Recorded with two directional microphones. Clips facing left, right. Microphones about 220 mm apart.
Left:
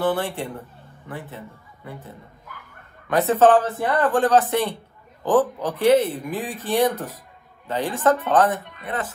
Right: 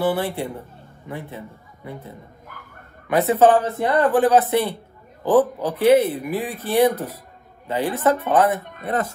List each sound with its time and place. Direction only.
0.0 s speech: 10° right (ahead or behind)
3.1 s a woman's voice: 15° right (ahead or behind)
8.6 s speech: 45° right (ahead or behind)